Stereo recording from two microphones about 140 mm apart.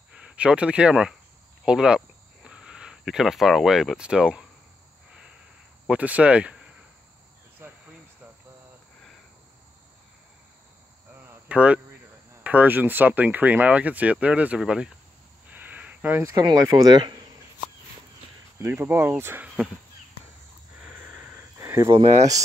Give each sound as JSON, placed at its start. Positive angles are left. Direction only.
{"t": 0.1, "sound": "speech", "side_deg": -10}
{"t": 1.6, "sound": "cricket", "side_deg": -5}
{"t": 5.9, "sound": "speech", "side_deg": -10}
{"t": 11.2, "sound": "a sound", "side_deg": -10}
{"t": 12.4, "sound": "speech", "side_deg": -10}
{"t": 18.6, "sound": "speech", "side_deg": -15}
{"t": 21.5, "sound": "cricket", "side_deg": -20}